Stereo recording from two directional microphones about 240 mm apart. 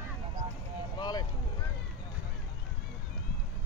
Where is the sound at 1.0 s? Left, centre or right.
Centre.